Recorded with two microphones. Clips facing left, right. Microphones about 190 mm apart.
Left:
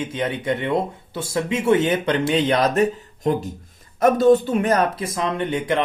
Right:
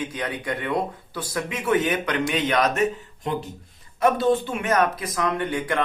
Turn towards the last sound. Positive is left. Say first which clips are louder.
# left 3 dB
turn(degrees=20)  # may be behind; listen again after turning